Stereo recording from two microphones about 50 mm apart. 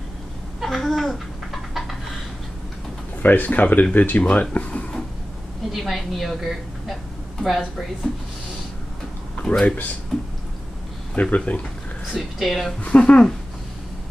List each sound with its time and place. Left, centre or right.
0.6 s babbling: centre
1.7 s a sound: centre
3.2 s speech: left
5.7 s a woman's voice: centre
9.4 s speech: centre
11.1 s speech: left
12.1 s speech: centre
12.8 s speech: left